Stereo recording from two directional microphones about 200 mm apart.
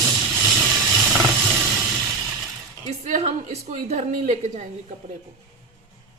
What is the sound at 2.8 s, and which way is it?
A woman's voice, 35° right (ahead or behind).